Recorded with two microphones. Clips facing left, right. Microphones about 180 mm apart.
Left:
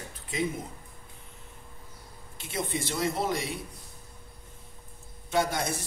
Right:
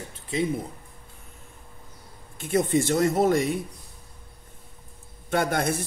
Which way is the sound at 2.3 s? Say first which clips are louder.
Right 10 dB; 50° right (ahead or behind).